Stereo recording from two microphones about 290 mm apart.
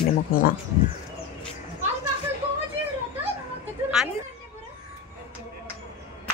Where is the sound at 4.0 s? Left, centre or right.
Centre.